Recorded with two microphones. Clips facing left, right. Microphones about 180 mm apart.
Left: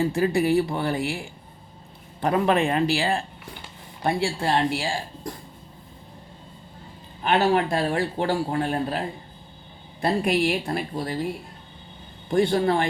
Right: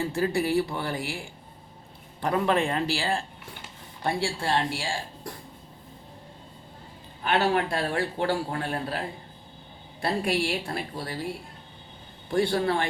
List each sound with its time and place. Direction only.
0.0 s speech: 15° left (ahead or behind)
2.2 s speech: 15° left (ahead or behind)
7.3 s speech: 20° left (ahead or behind)
12.3 s speech: 20° left (ahead or behind)